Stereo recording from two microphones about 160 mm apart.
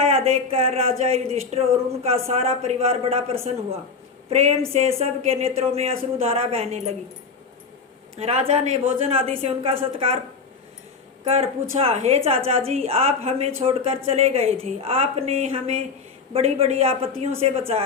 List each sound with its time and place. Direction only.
0.0 s a woman's voice: 40° right (ahead or behind)
8.2 s a woman's voice: 40° right (ahead or behind)
11.3 s a woman's voice: 40° right (ahead or behind)